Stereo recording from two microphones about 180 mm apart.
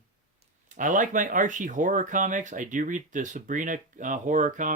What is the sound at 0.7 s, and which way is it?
Speech, 45° right (ahead or behind).